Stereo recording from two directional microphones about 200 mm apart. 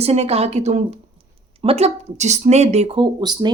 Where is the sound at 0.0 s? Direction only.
30° right (ahead or behind).